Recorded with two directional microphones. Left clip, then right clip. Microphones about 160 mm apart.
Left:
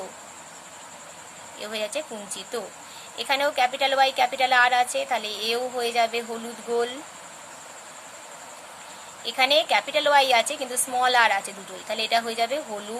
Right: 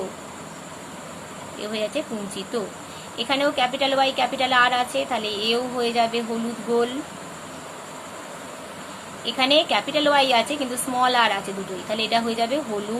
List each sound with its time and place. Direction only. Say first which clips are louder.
1.7 s speech: right 3 dB; 45° left (ahead or behind)
9.2 s speech: right 2 dB; 45° left (ahead or behind)